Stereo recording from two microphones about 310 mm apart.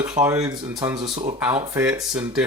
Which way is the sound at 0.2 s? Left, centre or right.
Centre.